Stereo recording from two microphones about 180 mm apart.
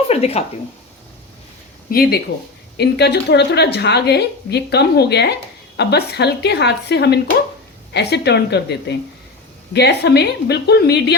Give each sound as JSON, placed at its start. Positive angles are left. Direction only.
{"t": 0.1, "sound": "speech", "side_deg": 35}
{"t": 1.9, "sound": "a woman's voice", "side_deg": 60}